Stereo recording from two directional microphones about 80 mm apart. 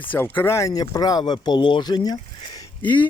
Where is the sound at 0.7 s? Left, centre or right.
Left.